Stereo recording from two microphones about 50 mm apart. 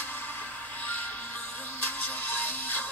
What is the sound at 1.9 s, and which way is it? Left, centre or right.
Music, left.